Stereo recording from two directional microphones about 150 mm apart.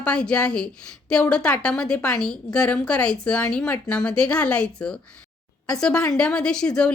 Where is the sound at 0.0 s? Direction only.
5° left (ahead or behind).